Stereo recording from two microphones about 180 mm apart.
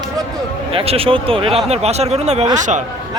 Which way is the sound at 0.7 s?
30° right (ahead or behind).